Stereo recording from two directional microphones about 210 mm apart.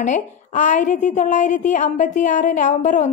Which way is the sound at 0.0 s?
35° left (ahead or behind).